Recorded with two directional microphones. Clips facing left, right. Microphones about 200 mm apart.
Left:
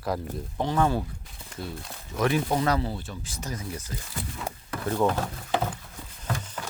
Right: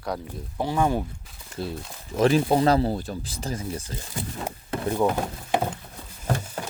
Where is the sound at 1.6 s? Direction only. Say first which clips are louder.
Right 5 dB; 30° right (ahead or behind); by 5.7 s 15° right (ahead or behind).